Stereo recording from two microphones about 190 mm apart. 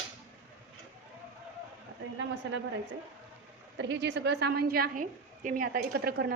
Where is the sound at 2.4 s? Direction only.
75° right (ahead or behind).